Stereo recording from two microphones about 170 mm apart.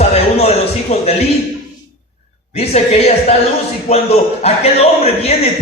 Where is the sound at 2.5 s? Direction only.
35° left (ahead or behind).